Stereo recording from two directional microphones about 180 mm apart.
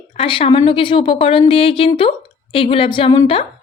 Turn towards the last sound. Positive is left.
turn(degrees=25)  # may be behind; listen again after turning